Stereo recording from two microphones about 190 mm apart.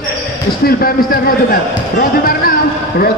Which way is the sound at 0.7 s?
50° left (ahead or behind).